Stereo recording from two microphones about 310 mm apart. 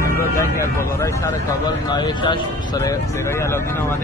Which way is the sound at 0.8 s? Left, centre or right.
Centre.